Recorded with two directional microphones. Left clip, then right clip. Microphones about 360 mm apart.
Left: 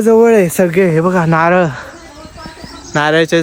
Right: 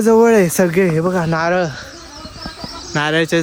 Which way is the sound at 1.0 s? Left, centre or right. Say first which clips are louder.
Left 5 dB; left.